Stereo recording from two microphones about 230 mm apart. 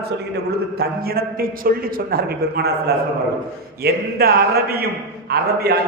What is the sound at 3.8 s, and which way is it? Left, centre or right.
A man's voice, right.